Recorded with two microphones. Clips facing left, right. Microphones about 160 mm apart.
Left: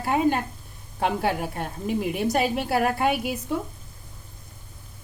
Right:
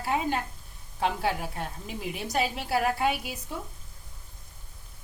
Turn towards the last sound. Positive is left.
turn(degrees=55)  # may be behind; listen again after turning